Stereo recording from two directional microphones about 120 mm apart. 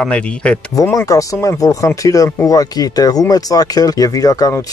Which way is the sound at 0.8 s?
25° left (ahead or behind).